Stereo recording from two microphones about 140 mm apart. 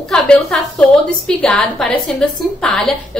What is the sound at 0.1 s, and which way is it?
A woman's voice, 5° left (ahead or behind).